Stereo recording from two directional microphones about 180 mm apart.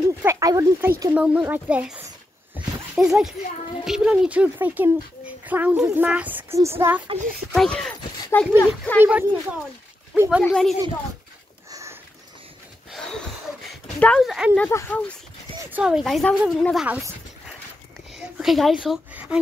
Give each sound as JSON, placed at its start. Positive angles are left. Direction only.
{"t": 0.2, "sound": "a child's voice", "side_deg": -15}
{"t": 2.5, "sound": "a sound", "side_deg": -5}
{"t": 3.8, "sound": "a child's voice", "side_deg": -5}
{"t": 7.5, "sound": "speech", "side_deg": 5}
{"t": 9.0, "sound": "a child's voice", "side_deg": -10}
{"t": 10.4, "sound": "speech", "side_deg": 5}
{"t": 11.7, "sound": "sniff", "side_deg": -15}
{"t": 13.9, "sound": "speech", "side_deg": 5}
{"t": 14.7, "sound": "speech", "side_deg": 10}
{"t": 15.6, "sound": "speech", "side_deg": -5}
{"t": 16.8, "sound": "dog", "side_deg": -10}
{"t": 18.1, "sound": "a woman's voice", "side_deg": 0}